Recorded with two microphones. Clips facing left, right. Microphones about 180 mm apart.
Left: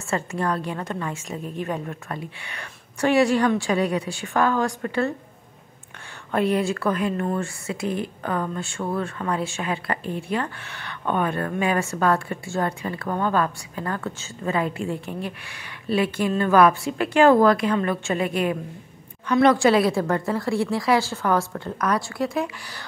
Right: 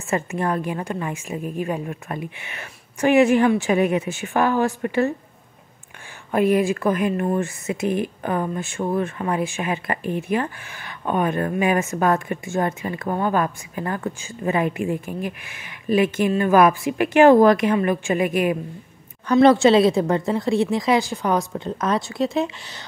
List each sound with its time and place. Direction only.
0.1 s speech: 15° right (ahead or behind)
2.0 s speech: 20° right (ahead or behind)
6.3 s speech: 15° right (ahead or behind)
19.3 s a woman's voice: 25° right (ahead or behind)